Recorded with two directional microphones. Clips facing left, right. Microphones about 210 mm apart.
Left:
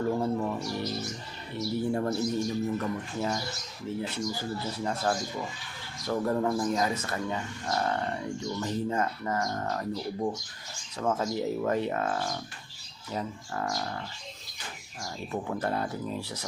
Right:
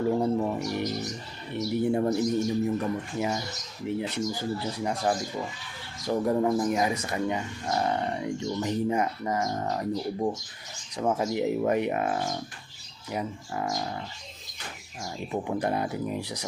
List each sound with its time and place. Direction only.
0.1 s speech: 20° right (ahead or behind)
15.0 s speech: 15° right (ahead or behind)